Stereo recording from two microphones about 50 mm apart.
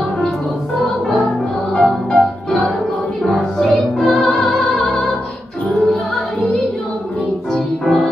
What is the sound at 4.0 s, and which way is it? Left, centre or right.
Music, centre.